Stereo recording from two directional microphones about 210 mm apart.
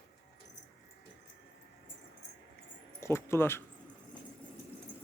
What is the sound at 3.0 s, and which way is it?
Speech, 10° left (ahead or behind).